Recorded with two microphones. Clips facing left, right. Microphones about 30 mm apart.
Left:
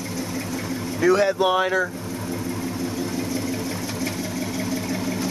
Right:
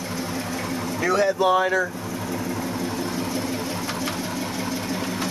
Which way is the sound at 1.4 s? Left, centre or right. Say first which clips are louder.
Right 1 dB; centre.